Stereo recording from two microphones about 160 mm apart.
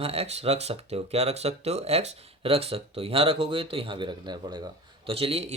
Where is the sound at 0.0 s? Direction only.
40° right (ahead or behind).